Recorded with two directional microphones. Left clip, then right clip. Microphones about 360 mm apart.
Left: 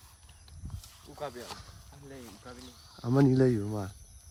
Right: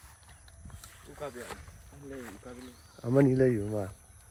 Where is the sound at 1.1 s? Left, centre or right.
Centre.